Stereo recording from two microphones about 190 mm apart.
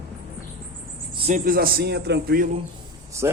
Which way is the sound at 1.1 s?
30° right (ahead or behind).